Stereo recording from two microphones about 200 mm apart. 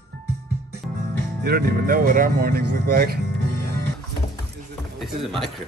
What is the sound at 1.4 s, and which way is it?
Speech, 50° right (ahead or behind).